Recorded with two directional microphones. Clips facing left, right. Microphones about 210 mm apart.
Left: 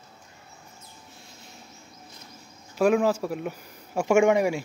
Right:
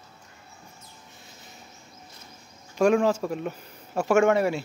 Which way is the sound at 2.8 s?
5° left (ahead or behind).